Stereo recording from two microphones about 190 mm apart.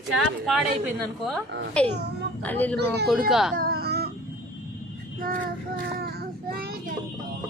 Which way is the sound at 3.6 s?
55° right (ahead or behind).